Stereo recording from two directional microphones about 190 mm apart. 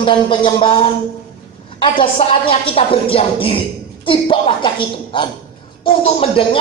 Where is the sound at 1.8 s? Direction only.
30° left (ahead or behind).